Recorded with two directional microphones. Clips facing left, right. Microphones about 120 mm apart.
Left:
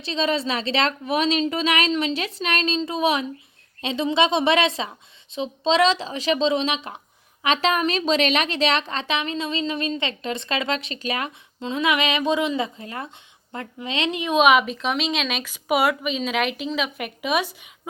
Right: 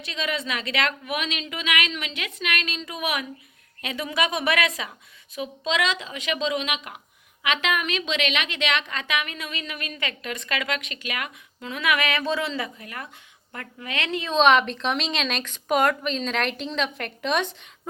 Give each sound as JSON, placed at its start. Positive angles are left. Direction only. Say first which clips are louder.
{"t": 0.0, "sound": "a woman's voice", "louder": "left 6 dB", "side_deg": 30}